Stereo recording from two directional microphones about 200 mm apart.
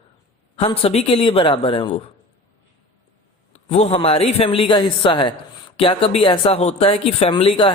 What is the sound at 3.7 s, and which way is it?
Speech, 30° left (ahead or behind).